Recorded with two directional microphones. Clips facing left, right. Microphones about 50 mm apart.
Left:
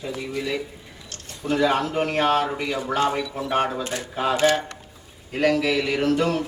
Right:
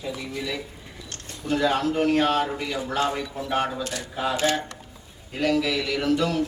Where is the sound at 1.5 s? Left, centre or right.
Left.